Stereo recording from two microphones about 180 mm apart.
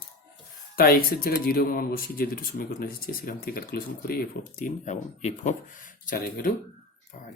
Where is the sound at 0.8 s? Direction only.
55° left (ahead or behind).